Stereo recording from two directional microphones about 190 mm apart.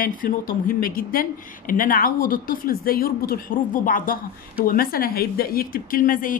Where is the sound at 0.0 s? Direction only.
45° left (ahead or behind).